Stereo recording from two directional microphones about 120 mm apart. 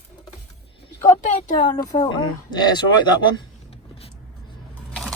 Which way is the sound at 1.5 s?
40° left (ahead or behind).